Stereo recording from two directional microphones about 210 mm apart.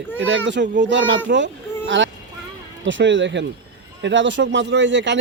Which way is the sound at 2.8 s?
60° right (ahead or behind).